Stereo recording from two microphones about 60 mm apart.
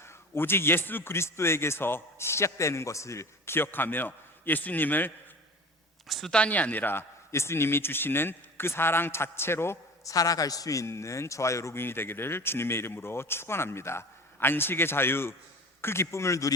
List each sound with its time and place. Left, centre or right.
0.0 s a man's voice: left
6.1 s speech: centre
6.3 s speech: left
7.3 s a man's voice: left
10.0 s a man's voice: left
11.8 s a man's voice: left